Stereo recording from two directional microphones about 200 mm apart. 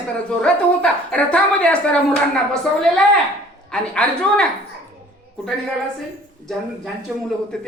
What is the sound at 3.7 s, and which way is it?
Speech, 5° left (ahead or behind).